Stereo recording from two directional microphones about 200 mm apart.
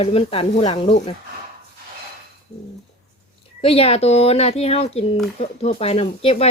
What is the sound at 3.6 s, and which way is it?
Speech, 30° left (ahead or behind).